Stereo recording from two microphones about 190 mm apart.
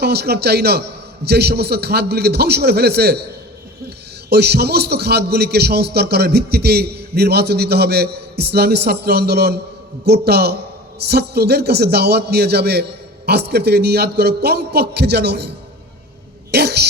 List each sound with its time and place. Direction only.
0.0 s a man's voice: 55° right (ahead or behind)
16.5 s speech: 60° right (ahead or behind)